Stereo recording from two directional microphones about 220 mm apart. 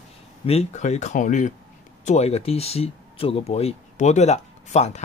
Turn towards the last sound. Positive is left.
turn(degrees=30)  # may be behind; listen again after turning